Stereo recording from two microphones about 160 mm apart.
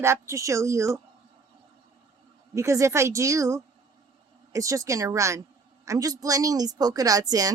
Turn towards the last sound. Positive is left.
turn(degrees=-20)  # may be behind; listen again after turning